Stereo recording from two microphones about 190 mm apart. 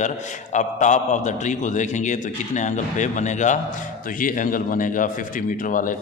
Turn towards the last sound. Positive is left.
turn(degrees=45)  # may be behind; listen again after turning